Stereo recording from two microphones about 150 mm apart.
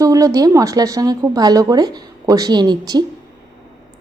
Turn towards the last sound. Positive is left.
turn(degrees=-25)  # may be behind; listen again after turning